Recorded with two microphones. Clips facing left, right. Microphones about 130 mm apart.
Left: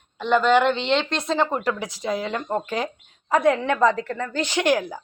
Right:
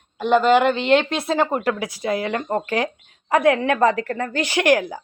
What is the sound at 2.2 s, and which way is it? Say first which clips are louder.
A woman's voice: right 3 dB; 60° right (ahead or behind).